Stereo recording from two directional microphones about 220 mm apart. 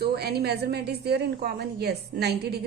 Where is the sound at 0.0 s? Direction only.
45° right (ahead or behind).